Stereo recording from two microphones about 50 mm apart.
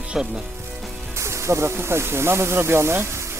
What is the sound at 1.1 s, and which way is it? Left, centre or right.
Speech, right.